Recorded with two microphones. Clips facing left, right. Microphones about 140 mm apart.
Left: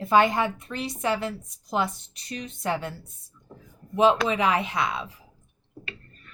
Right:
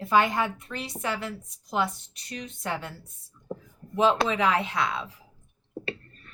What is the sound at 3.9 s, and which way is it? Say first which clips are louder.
Speech: left 2 dB; 15° left (ahead or behind).